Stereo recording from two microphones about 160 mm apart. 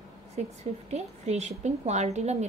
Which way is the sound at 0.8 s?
45° right (ahead or behind).